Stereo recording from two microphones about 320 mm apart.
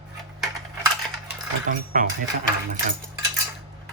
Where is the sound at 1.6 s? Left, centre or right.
Right.